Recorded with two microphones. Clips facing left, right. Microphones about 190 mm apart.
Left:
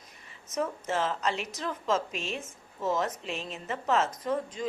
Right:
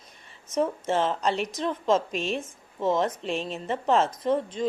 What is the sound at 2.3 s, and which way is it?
Speech, 30° right (ahead or behind).